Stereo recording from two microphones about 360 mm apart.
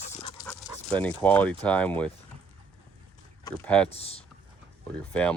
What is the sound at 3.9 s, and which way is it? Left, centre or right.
Speech, centre.